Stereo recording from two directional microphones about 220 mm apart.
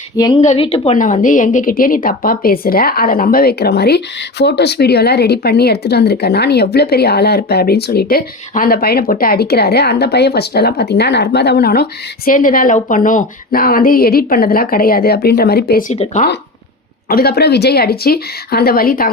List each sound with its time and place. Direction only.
0.4 s a woman's voice: 25° left (ahead or behind); by 15.8 s 45° left (ahead or behind)
15.9 s speech: 35° left (ahead or behind)
17.1 s a woman's voice: 45° left (ahead or behind)